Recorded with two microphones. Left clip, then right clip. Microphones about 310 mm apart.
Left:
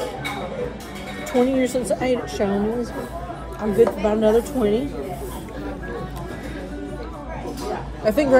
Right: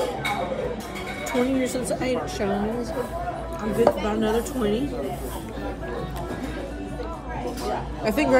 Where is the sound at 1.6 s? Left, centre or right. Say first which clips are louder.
Left 4 dB; centre.